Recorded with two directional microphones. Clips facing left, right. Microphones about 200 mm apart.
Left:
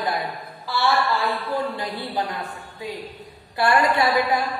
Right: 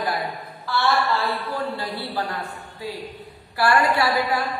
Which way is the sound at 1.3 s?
15° left (ahead or behind).